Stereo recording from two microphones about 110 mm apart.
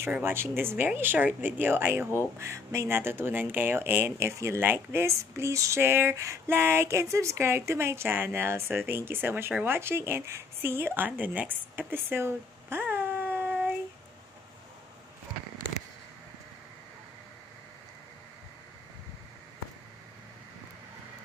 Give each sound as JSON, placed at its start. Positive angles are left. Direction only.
{"t": 0.0, "sound": "speech", "side_deg": -20}